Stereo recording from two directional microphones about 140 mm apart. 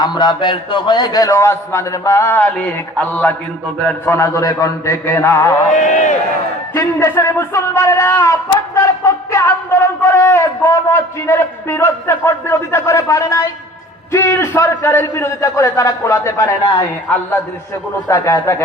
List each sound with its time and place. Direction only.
0.0 s a man's voice: 30° left (ahead or behind)
5.7 s a man's voice: 60° left (ahead or behind)
6.7 s a man's voice: 20° left (ahead or behind)